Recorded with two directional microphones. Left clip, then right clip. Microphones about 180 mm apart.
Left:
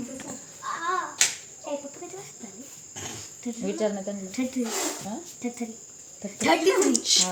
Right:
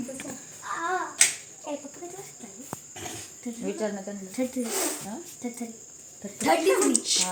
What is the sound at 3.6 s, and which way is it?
Speech, 50° left (ahead or behind).